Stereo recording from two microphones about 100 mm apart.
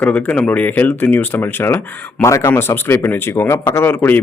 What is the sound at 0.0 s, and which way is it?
Speech, 15° left (ahead or behind).